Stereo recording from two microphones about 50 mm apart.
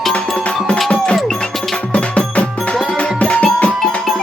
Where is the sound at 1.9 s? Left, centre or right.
Left.